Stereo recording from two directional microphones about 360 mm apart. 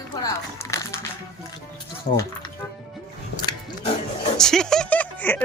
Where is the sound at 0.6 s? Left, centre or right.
Centre.